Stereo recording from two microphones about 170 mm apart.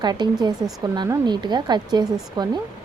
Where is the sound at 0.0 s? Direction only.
25° right (ahead or behind).